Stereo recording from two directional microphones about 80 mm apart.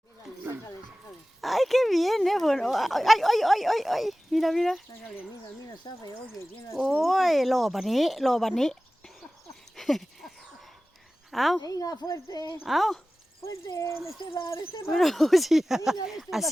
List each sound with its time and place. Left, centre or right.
1.4 s speech: centre
5.9 s speech: left
7.0 s speech: centre
9.7 s a sound: centre
11.3 s speech: centre
11.6 s speech: left
12.6 s speech: centre
13.4 s speech: left
14.9 s speech: centre